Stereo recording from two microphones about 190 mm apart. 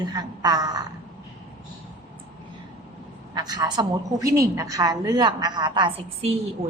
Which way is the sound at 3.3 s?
20° right (ahead or behind).